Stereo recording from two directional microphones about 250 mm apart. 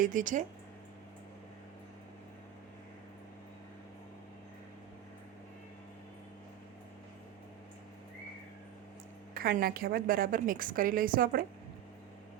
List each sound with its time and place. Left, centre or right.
0.0 s a woman's voice: right
9.3 s a woman's voice: right